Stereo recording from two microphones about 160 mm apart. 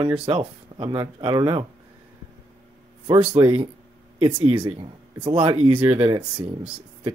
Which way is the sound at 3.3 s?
35° right (ahead or behind).